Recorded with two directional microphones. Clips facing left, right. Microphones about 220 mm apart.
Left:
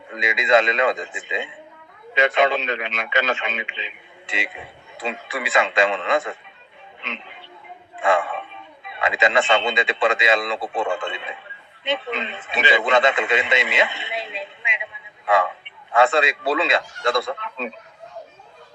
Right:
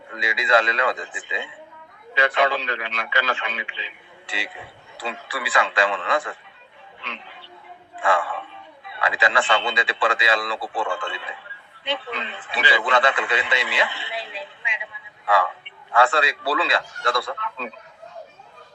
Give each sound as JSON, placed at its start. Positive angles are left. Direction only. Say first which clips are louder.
{"t": 0.1, "sound": "a man's voice", "louder": "left 3 dB", "side_deg": 20}
{"t": 7.0, "sound": "music", "louder": "left 3 dB", "side_deg": 20}
{"t": 7.9, "sound": "a man's voice", "louder": "left 2 dB", "side_deg": 25}